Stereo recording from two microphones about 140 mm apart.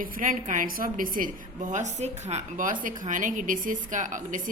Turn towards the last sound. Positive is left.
turn(degrees=-65)  # may be behind; listen again after turning